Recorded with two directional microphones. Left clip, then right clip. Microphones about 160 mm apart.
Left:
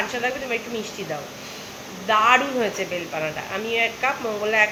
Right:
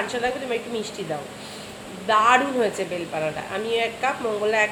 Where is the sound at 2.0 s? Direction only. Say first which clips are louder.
Even; 10° right (ahead or behind).